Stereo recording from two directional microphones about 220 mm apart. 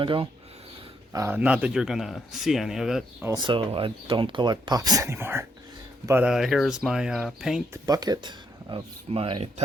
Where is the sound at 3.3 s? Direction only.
20° right (ahead or behind); by 7.6 s centre (ahead or behind).